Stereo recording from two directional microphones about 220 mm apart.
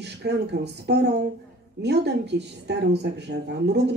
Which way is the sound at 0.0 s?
50° right (ahead or behind).